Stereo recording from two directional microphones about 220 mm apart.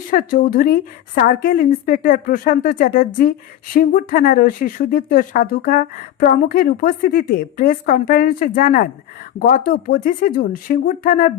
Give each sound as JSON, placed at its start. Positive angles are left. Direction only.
{"t": 0.1, "sound": "speech", "side_deg": 40}